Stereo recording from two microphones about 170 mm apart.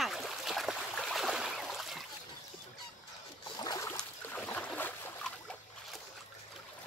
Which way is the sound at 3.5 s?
25° left (ahead or behind).